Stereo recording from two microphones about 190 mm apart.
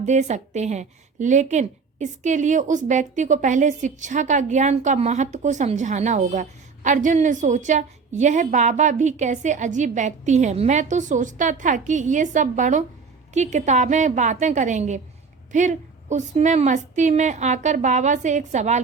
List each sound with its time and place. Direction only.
0.0 s a woman's voice: 40° right (ahead or behind)